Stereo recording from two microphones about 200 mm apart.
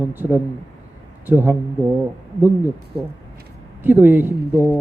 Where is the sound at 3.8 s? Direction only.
10° right (ahead or behind).